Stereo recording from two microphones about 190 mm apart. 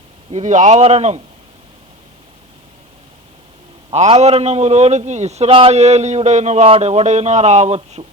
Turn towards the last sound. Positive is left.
turn(degrees=-35)  # may be behind; listen again after turning